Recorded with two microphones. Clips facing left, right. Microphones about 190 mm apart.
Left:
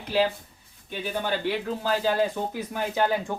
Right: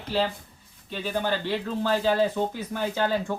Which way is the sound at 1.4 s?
10° left (ahead or behind).